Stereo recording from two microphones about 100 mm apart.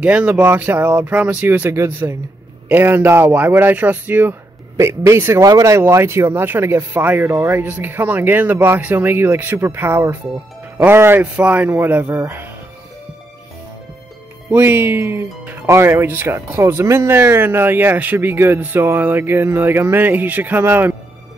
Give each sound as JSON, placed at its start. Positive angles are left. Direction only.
{"t": 0.0, "sound": "speech", "side_deg": -15}
{"t": 14.5, "sound": "speech", "side_deg": -20}